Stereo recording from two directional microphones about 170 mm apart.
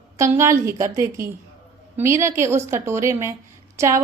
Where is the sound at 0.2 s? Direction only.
15° right (ahead or behind).